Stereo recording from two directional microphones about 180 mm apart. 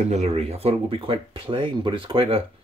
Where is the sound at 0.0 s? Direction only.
40° right (ahead or behind).